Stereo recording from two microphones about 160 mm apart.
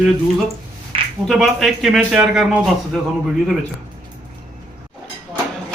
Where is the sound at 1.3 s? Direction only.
Centre (ahead or behind).